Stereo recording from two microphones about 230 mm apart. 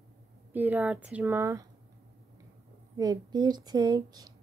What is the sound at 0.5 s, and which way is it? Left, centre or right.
A woman's voice, centre.